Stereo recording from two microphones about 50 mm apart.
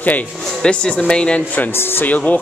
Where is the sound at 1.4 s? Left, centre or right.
Left.